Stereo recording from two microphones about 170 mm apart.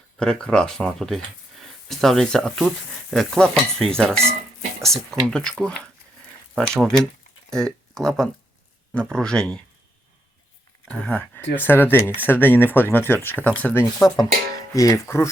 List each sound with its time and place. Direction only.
0.2 s speech: 5° left (ahead or behind)
10.8 s speech: 5° left (ahead or behind)
14.7 s speech: 20° left (ahead or behind)